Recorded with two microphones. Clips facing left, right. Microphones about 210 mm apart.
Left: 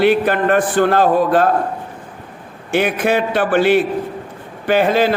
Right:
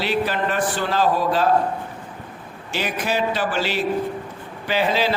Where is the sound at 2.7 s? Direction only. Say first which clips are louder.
Left 9 dB; 55° left (ahead or behind).